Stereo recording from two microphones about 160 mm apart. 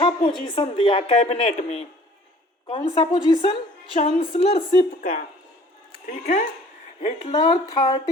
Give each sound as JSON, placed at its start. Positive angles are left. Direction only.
{"t": 0.0, "sound": "a woman's voice", "side_deg": 30}
{"t": 4.9, "sound": "speech", "side_deg": 55}
{"t": 7.0, "sound": "speech", "side_deg": 30}